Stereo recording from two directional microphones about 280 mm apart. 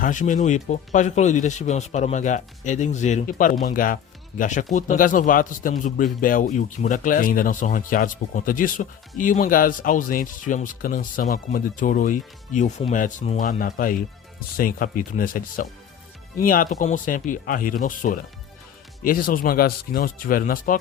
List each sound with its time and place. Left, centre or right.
0.0 s a man's voice: left